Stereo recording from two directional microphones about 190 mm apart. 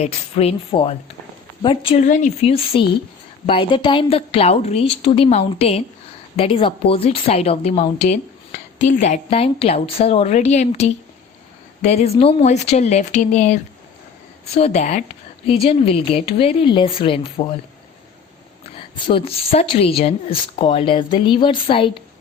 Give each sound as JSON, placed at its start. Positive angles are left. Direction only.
{"t": 0.0, "sound": "a woman's voice", "side_deg": 30}
{"t": 2.0, "sound": "a woman's voice", "side_deg": 40}
{"t": 19.0, "sound": "speech", "side_deg": 30}